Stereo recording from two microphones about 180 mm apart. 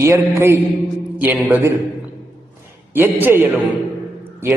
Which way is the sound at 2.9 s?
10° right (ahead or behind).